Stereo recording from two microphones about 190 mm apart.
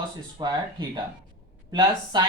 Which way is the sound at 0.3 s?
20° right (ahead or behind).